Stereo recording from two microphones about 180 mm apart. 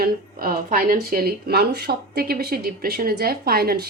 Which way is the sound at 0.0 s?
55° right (ahead or behind).